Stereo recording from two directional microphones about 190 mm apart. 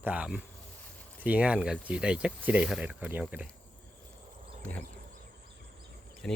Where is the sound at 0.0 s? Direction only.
5° right (ahead or behind).